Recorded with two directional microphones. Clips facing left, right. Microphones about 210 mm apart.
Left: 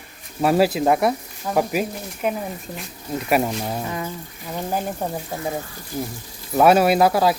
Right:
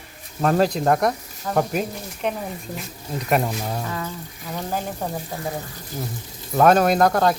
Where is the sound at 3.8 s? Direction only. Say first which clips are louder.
Left 1 dB; 20° left (ahead or behind).